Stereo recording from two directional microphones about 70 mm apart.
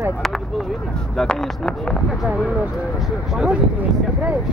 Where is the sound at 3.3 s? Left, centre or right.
Centre.